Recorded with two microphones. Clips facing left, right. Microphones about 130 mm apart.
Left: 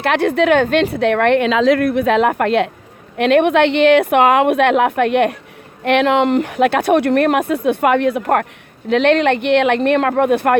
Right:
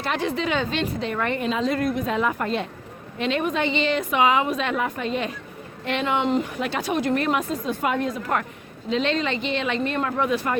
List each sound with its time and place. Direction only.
0.0 s speech: 65° left (ahead or behind)